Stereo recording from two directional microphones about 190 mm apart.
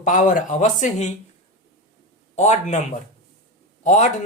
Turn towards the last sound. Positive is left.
turn(degrees=40)  # may be behind; listen again after turning